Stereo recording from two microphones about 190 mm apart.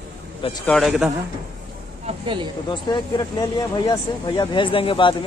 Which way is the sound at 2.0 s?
25° right (ahead or behind).